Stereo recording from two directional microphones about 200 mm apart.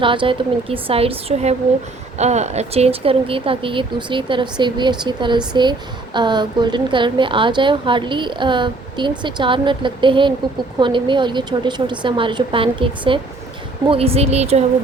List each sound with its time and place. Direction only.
0.0 s a woman's voice: 25° right (ahead or behind)